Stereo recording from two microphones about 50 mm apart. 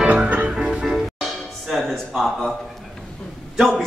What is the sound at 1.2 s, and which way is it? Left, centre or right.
Music, centre.